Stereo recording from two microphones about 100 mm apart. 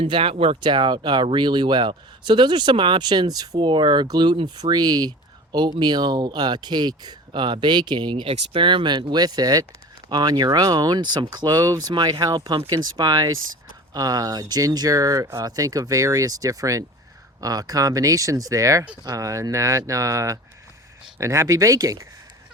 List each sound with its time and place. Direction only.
0.0 s speech: 65° right (ahead or behind)
0.6 s speech: 50° right (ahead or behind); by 22.0 s 35° right (ahead or behind)